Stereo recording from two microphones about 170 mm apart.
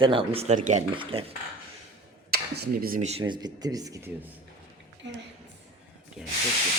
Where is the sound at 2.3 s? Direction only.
65° right (ahead or behind).